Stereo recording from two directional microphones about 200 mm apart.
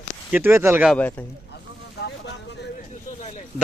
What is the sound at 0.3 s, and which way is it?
Speech, 10° right (ahead or behind).